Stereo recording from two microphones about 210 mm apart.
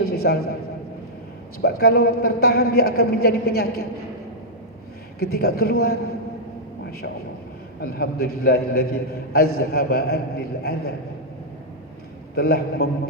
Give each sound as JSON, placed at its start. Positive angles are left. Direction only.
{"t": 0.0, "sound": "a sound", "side_deg": 50}
{"t": 1.6, "sound": "a man's voice", "side_deg": 50}
{"t": 5.2, "sound": "a man's voice", "side_deg": 50}
{"t": 7.8, "sound": "a man's voice", "side_deg": 45}
{"t": 12.4, "sound": "a man's voice", "side_deg": 50}